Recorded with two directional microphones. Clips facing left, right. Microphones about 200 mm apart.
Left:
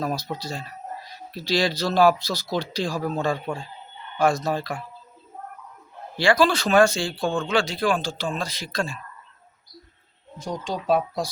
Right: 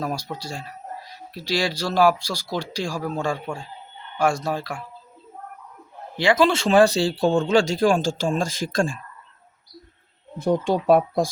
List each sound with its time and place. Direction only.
0.0 s speech: 10° right (ahead or behind)
6.1 s speech: 20° right (ahead or behind); by 9.0 s 50° right (ahead or behind)
10.3 s speech: 60° right (ahead or behind)